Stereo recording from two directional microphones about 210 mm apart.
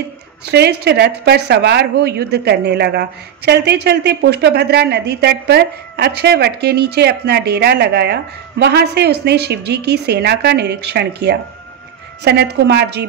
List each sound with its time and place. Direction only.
0.5 s speech: 50° right (ahead or behind)